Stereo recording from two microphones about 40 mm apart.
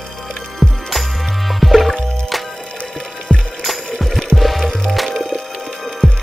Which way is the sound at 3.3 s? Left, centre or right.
Left.